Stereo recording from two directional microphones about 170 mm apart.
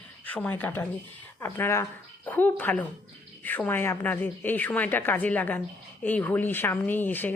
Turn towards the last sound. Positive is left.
turn(degrees=10)  # may be behind; listen again after turning